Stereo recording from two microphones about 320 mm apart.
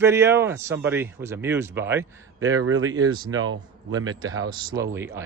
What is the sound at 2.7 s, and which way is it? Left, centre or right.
Speech, right.